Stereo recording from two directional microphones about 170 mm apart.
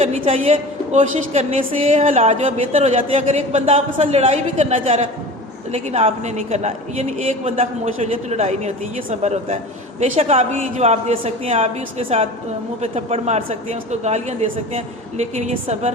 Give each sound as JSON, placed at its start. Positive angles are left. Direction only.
{"t": 0.0, "sound": "a woman's voice", "side_deg": -40}